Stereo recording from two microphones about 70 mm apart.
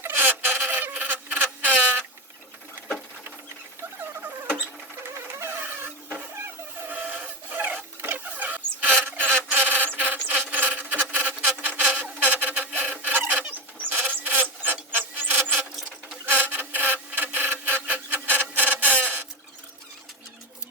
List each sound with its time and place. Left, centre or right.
0.2 s insect: right
4.2 s rodents: right
5.3 s printer: right
9.0 s a sound: right
9.5 s rub: right
11.8 s a sound: right
16.2 s filing: right